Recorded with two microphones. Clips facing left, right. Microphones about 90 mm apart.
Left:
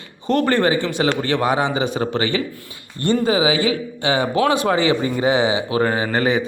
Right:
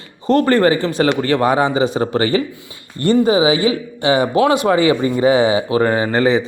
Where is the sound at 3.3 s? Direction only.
25° right (ahead or behind).